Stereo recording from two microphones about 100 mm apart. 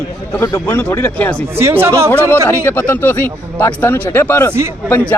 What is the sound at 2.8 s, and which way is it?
Speech, 20° left (ahead or behind).